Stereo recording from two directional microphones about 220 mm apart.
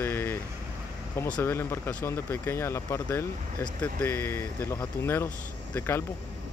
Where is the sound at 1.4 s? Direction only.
10° left (ahead or behind).